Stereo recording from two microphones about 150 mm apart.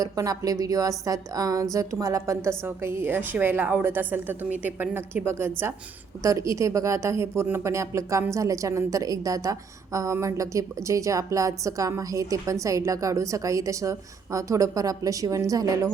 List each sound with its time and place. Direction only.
0.0 s a woman's voice: 25° right (ahead or behind)